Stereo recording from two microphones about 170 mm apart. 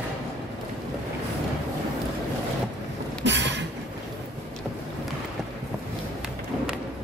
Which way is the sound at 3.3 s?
90° right.